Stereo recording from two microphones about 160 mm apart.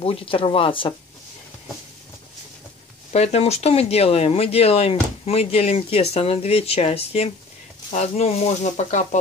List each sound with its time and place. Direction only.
0.0 s speech: 35° left (ahead or behind)
3.1 s speech: 45° left (ahead or behind)